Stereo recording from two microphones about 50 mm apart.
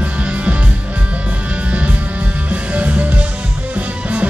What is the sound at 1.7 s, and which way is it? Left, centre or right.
Music, right.